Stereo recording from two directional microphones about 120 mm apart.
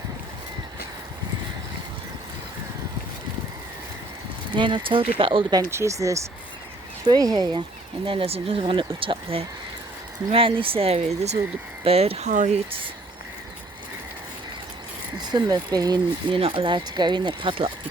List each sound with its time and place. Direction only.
4.5 s speech: 40° right (ahead or behind)
5.7 s speech: 25° right (ahead or behind)
8.0 s speech: 50° right (ahead or behind); by 12.6 s 75° right (ahead or behind)
15.3 s speech: 35° right (ahead or behind)
16.3 s speech: 50° right (ahead or behind)